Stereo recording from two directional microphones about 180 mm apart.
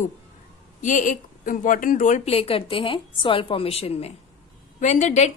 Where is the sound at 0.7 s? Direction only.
45° left (ahead or behind).